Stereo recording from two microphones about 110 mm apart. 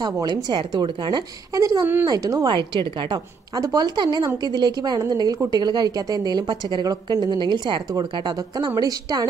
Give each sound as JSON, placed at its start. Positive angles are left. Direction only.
{"t": 0.0, "sound": "a woman's voice", "side_deg": -40}
{"t": 1.5, "sound": "a woman's voice", "side_deg": -30}
{"t": 2.5, "sound": "a woman's voice", "side_deg": -45}